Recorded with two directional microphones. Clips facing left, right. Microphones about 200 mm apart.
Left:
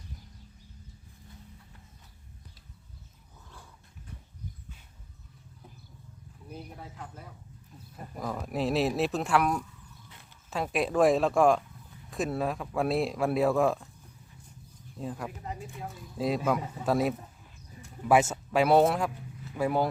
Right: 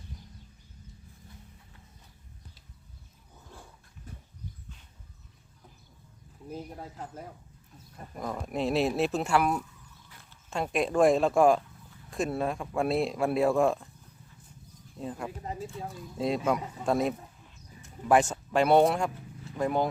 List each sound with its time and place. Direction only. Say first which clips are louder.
6.5 s speech: right 4 dB; 40° right (ahead or behind)
7.9 s speech: even; centre (ahead or behind)
14.9 s speech: even; centre (ahead or behind)